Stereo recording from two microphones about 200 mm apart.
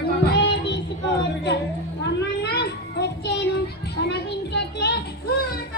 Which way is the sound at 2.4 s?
55° left (ahead or behind).